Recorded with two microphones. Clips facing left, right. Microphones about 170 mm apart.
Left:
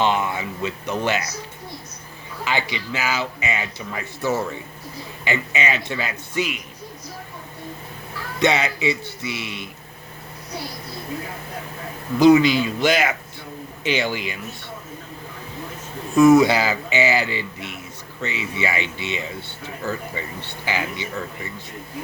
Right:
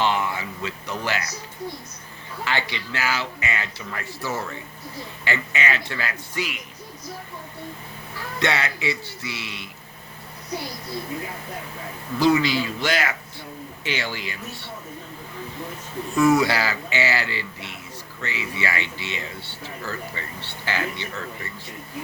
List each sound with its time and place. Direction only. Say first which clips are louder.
0.0 s speech: left 2 dB; 20° left (ahead or behind)
2.4 s speech: left 2 dB; 15° left (ahead or behind)
8.4 s speech: left 5 dB; 20° left (ahead or behind)
12.2 s speech: left 6 dB; 20° left (ahead or behind)
16.1 s speech: left 6 dB; 20° left (ahead or behind)